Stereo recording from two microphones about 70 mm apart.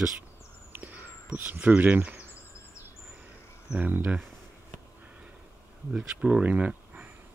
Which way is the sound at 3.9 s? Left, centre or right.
Right.